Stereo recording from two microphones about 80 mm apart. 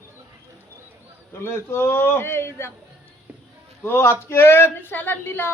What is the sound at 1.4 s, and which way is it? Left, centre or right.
A man's voice, left.